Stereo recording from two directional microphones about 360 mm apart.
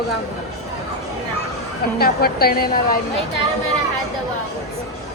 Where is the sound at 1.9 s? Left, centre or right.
Left.